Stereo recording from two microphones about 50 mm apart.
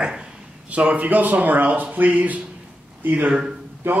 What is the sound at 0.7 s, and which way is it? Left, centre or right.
Speech, right.